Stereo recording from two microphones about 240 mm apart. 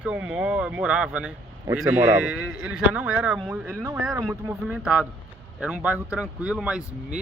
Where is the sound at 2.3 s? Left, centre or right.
Right.